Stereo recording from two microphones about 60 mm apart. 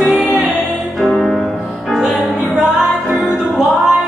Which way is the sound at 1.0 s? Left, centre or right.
Centre.